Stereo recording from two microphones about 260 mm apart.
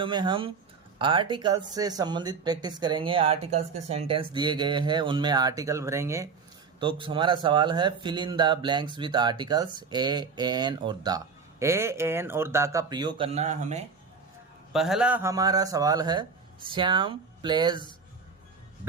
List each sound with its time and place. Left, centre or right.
0.0 s speech: centre
14.7 s speech: centre